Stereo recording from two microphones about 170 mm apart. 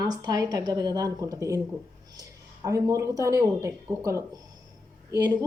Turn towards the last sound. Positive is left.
turn(degrees=-20)  # may be behind; listen again after turning